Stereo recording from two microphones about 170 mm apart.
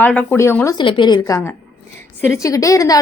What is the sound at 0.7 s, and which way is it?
A woman's voice, 30° left (ahead or behind).